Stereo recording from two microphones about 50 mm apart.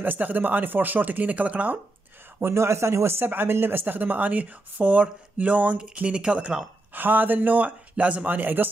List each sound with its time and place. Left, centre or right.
0.0 s speech: right
2.4 s speech: right
6.9 s speech: right